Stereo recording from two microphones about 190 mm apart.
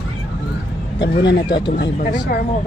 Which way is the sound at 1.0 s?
65° left (ahead or behind).